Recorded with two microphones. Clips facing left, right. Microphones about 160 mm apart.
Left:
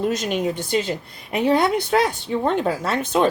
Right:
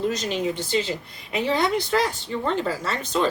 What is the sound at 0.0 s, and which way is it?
A woman's voice, 55° left (ahead or behind).